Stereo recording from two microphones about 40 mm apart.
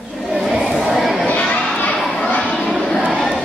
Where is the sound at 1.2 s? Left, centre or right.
Left.